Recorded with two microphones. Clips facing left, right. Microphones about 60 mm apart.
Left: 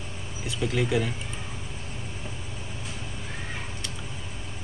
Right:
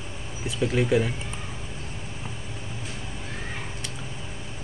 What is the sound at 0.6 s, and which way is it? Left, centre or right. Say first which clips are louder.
Speech: right 3 dB; right.